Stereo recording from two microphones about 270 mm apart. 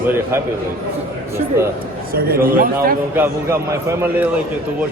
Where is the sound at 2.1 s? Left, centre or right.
Right.